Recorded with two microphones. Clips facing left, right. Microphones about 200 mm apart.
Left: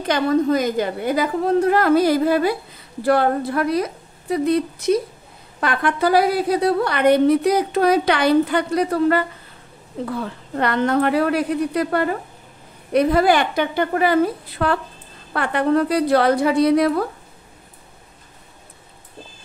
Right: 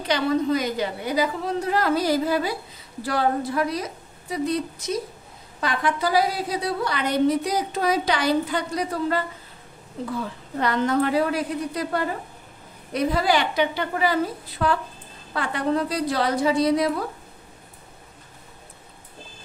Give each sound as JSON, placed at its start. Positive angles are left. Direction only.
{"t": 0.0, "sound": "a woman's voice", "side_deg": 50}
{"t": 10.2, "sound": "a woman's voice", "side_deg": 60}